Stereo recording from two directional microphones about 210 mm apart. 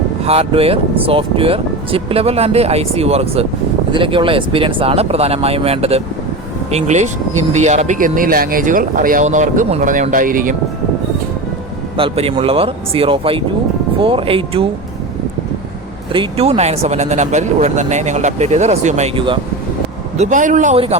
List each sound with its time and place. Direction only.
0.3 s speech: 30° right (ahead or behind)
11.9 s speech: 25° right (ahead or behind)
16.1 s speech: 30° right (ahead or behind)
20.1 s speech: 35° right (ahead or behind)